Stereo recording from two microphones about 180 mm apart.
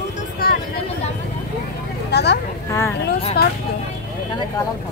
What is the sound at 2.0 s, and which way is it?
Vehicle, 65° left (ahead or behind).